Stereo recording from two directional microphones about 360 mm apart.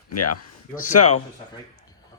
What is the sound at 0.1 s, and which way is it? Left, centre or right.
Speech, left.